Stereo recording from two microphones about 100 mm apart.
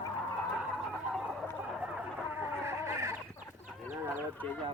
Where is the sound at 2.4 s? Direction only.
25° right (ahead or behind).